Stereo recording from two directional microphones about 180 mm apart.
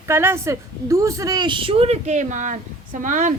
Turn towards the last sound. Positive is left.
turn(degrees=-45)  # may be behind; listen again after turning